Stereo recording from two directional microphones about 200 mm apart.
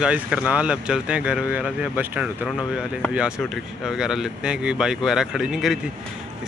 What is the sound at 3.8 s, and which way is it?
Speech, centre (ahead or behind).